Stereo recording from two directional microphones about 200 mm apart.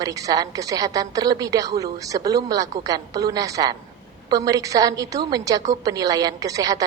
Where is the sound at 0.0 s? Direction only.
15° right (ahead or behind).